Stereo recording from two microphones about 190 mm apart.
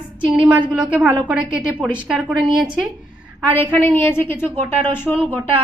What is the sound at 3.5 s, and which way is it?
A woman's voice, 10° left (ahead or behind).